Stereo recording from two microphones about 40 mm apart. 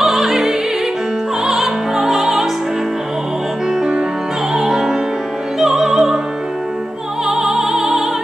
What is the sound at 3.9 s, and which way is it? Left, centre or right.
Music, right.